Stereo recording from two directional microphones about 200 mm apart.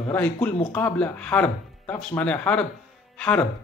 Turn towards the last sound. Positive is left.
turn(degrees=5)  # may be behind; listen again after turning